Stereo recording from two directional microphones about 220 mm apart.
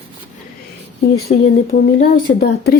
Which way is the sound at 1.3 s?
35° left (ahead or behind).